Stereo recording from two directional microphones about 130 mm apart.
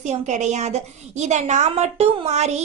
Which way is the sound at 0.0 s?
65° right (ahead or behind).